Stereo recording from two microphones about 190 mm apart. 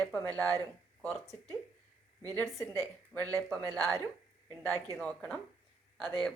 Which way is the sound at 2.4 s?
15° left (ahead or behind).